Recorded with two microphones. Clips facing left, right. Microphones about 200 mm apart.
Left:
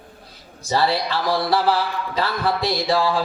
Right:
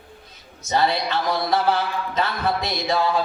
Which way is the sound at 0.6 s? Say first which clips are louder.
Left 1 dB; 30° left (ahead or behind).